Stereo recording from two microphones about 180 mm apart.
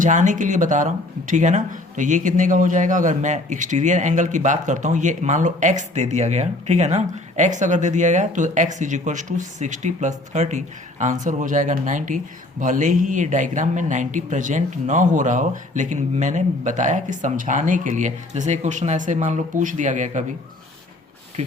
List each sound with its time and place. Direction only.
0.0 s speech: 45° right (ahead or behind)